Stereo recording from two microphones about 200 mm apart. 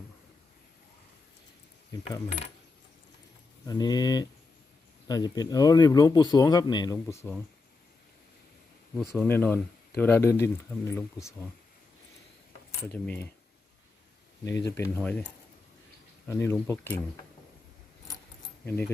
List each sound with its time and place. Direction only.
3.7 s speech: 20° left (ahead or behind)
9.1 s speech: 10° left (ahead or behind)
12.9 s speech: 10° left (ahead or behind)
14.4 s speech: 15° left (ahead or behind)